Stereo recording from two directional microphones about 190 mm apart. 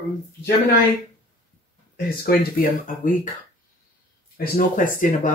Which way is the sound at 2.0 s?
55° left (ahead or behind).